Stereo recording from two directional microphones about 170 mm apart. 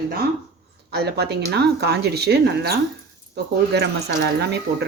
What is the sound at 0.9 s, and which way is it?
Speech, 75° right (ahead or behind).